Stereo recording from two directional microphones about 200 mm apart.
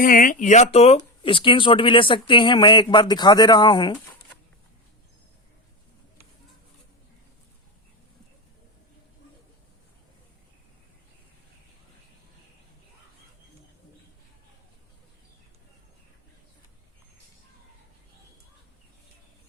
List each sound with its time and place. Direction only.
0.0 s speech: 45° left (ahead or behind); by 3.9 s 20° left (ahead or behind)